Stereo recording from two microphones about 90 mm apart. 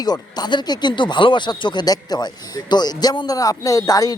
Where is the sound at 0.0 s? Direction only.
50° left (ahead or behind).